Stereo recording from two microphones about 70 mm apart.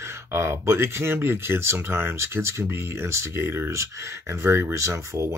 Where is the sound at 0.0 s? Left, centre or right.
Right.